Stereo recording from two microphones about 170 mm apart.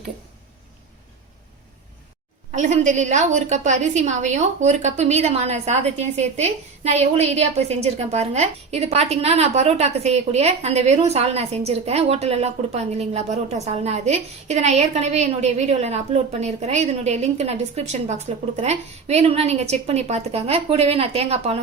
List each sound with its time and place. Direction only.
2.6 s a woman's voice: 45° right (ahead or behind)